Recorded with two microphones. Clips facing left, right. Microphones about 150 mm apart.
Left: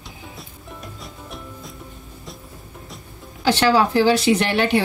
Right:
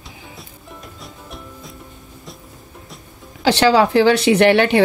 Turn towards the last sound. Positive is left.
turn(degrees=-65)  # may be behind; listen again after turning